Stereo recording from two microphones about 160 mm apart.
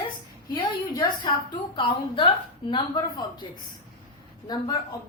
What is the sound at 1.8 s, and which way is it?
A woman's voice, 35° left (ahead or behind).